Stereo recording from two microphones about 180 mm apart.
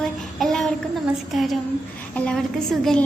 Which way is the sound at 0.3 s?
Centre (ahead or behind).